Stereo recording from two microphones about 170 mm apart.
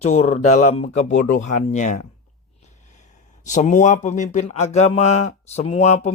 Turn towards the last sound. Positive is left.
turn(degrees=40)  # may be behind; listen again after turning